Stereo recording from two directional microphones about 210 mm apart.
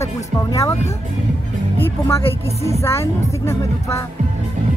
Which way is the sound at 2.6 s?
15° left (ahead or behind).